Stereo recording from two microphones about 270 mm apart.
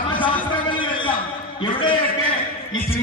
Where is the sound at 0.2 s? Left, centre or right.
Centre.